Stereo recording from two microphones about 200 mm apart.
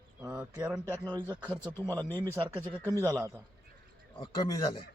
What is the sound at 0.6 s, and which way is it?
Speech, 5° right (ahead or behind).